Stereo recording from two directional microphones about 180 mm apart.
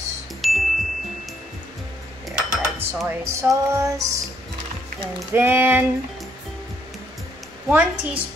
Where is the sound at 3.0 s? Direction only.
15° right (ahead or behind).